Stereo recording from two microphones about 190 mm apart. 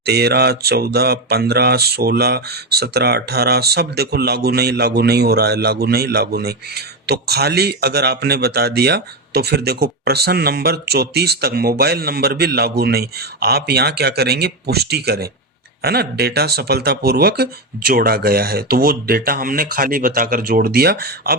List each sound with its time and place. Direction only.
0.0 s speech: 55° right (ahead or behind)